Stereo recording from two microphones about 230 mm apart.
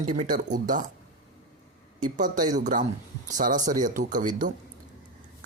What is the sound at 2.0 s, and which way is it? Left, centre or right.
Speech, right.